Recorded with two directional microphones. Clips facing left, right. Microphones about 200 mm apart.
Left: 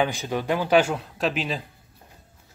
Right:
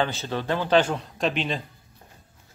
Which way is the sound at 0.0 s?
15° left (ahead or behind).